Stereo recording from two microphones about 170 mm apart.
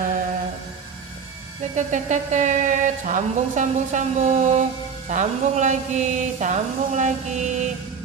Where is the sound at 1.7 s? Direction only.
45° right (ahead or behind).